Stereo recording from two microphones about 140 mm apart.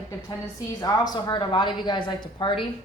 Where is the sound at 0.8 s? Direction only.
25° left (ahead or behind).